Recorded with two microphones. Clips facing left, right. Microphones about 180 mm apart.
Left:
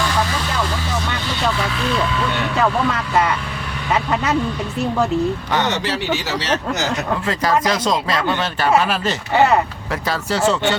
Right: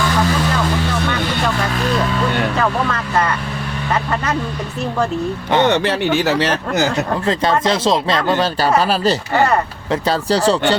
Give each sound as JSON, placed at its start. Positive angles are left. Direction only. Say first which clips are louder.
{"t": 1.8, "sound": "vehicle", "louder": "right 2 dB", "side_deg": -45}
{"t": 5.6, "sound": "speech", "louder": "right 5 dB", "side_deg": -55}
{"t": 7.3, "sound": "speech", "louder": "right 2 dB", "side_deg": -30}